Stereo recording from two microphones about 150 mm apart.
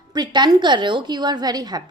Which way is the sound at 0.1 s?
30° right (ahead or behind).